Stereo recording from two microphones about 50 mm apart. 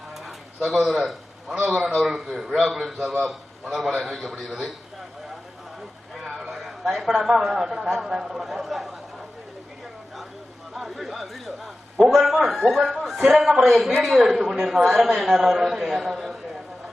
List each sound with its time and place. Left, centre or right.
0.7 s a man's voice: centre
1.5 s a man's voice: right
1.9 s a man's voice: centre
6.5 s a man's voice: centre
10.8 s a sound: centre
12.5 s a man's voice: centre